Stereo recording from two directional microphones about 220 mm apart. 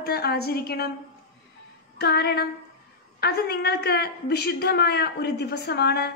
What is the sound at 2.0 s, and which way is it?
A woman's voice, 50° left (ahead or behind).